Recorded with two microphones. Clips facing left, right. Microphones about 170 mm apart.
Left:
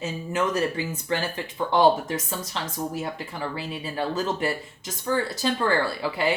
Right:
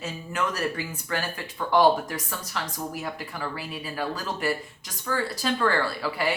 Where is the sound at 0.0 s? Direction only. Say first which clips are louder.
Left 3 dB; 20° left (ahead or behind).